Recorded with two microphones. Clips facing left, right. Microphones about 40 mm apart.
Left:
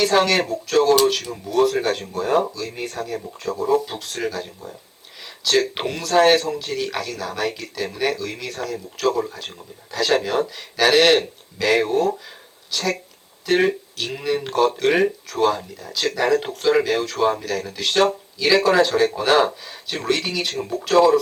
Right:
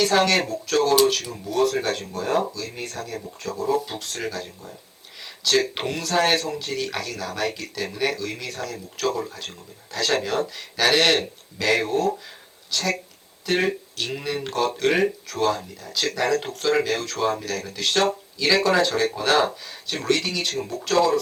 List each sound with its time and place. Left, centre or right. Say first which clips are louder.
0.0 s speech: left 2 dB; centre
3.8 s speech: left 3 dB; centre
20.5 s speech: left 2 dB; left
20.8 s speech: left 5 dB; centre